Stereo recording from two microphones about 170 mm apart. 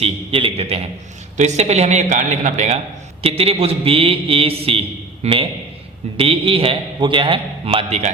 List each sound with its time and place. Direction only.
0.0 s a man's voice: 35° right (ahead or behind)